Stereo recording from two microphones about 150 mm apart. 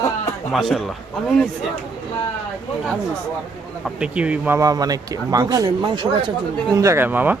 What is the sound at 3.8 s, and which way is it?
Speech, 5° right (ahead or behind).